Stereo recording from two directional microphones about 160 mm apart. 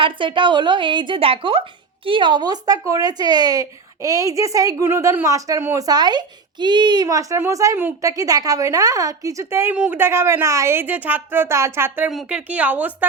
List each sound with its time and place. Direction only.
0.0 s a woman's voice: 30° right (ahead or behind); by 13.1 s 10° right (ahead or behind)